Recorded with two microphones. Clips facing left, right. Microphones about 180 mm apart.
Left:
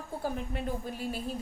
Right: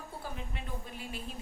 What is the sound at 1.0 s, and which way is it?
Speech, 40° left (ahead or behind).